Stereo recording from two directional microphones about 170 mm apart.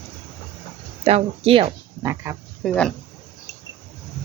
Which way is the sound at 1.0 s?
35° right (ahead or behind).